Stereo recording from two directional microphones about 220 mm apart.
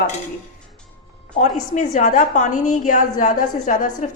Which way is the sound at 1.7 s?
35° left (ahead or behind).